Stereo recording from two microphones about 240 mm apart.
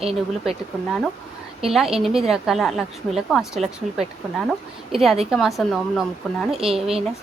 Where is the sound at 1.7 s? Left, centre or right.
Centre.